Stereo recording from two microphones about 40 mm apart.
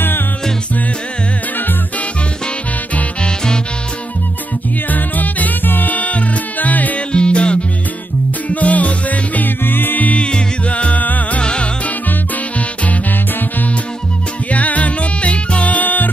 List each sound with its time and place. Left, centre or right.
3.0 s music: left
4.9 s music: left
7.1 s music: left
8.5 s music: left
9.7 s music: left
10.0 s music: left
11.4 s music: left
14.5 s music: left